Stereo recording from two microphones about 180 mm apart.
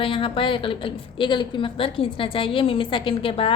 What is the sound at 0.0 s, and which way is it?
A woman's voice, 30° left (ahead or behind).